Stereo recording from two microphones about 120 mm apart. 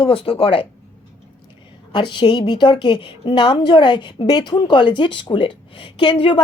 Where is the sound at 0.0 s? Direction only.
50° left (ahead or behind).